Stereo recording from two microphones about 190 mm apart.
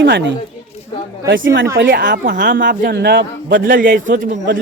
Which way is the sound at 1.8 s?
60° right (ahead or behind).